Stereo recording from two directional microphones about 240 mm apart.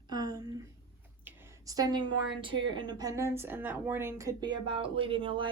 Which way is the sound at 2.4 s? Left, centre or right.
Right.